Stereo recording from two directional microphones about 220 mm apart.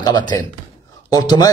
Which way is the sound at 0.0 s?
20° left (ahead or behind).